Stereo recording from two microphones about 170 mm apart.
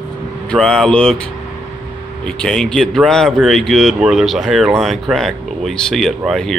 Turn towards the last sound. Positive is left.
turn(degrees=0)  # may be behind; listen again after turning